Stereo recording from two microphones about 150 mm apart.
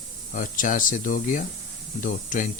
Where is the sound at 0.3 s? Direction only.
60° left (ahead or behind).